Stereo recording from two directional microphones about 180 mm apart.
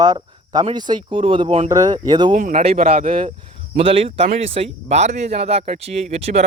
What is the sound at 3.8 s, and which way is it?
Speech, 30° right (ahead or behind).